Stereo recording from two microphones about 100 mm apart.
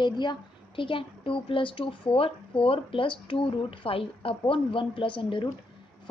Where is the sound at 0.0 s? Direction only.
50° left (ahead or behind).